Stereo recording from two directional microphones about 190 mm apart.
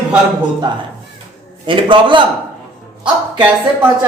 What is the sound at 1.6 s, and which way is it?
Speech, 25° right (ahead or behind).